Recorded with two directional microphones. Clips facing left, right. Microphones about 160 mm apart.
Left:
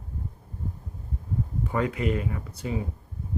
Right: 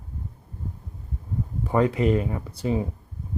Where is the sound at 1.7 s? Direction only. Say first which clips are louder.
Right 7 dB; 30° right (ahead or behind).